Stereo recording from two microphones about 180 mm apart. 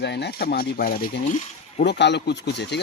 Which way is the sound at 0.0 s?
70° left (ahead or behind).